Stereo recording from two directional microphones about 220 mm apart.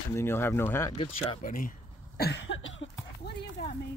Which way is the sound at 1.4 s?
40° left (ahead or behind).